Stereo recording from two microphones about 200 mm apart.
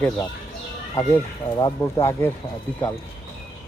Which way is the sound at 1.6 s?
20° left (ahead or behind).